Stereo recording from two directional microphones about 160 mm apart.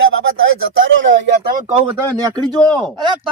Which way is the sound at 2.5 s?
10° left (ahead or behind).